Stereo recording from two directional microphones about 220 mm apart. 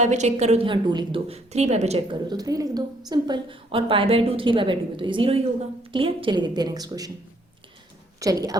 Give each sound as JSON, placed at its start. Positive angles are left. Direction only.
{"t": 0.0, "sound": "a woman's voice", "side_deg": -30}
{"t": 8.2, "sound": "a woman's voice", "side_deg": -15}